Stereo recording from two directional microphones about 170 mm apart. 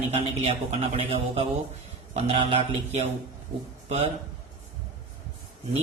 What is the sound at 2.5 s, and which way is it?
Speech, 40° right (ahead or behind).